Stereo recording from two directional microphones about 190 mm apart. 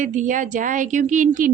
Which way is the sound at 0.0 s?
40° right (ahead or behind).